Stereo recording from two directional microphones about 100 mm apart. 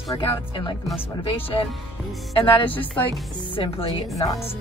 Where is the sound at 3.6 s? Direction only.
55° left (ahead or behind).